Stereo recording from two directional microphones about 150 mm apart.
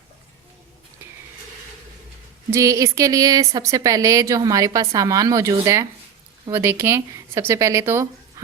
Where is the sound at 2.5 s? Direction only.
20° right (ahead or behind).